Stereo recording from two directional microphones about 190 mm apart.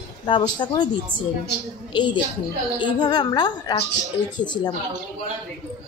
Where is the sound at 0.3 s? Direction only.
25° left (ahead or behind).